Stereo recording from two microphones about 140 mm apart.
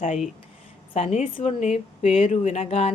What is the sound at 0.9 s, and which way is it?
A woman's voice, 55° left (ahead or behind).